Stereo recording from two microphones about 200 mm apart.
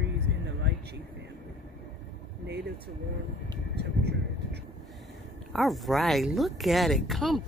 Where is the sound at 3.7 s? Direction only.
55° right (ahead or behind).